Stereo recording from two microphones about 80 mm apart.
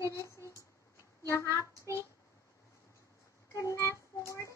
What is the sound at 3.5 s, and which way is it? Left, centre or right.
Child singing, left.